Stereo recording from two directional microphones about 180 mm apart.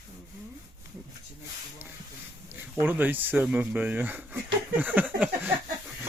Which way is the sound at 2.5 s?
10° right (ahead or behind).